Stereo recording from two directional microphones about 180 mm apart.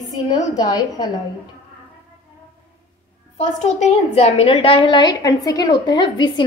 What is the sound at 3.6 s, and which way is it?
A woman's voice, 40° left (ahead or behind).